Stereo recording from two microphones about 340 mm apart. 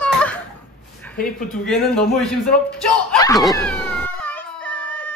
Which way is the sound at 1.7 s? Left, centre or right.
Centre.